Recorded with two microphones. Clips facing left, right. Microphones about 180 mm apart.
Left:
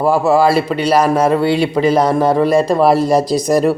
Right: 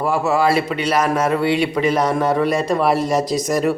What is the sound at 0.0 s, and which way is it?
Speech, 35° left (ahead or behind).